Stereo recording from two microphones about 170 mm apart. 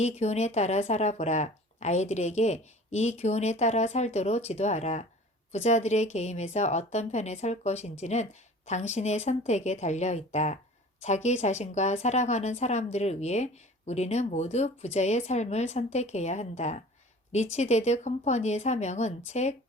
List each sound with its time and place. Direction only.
0.0 s a woman's voice: 40° left (ahead or behind)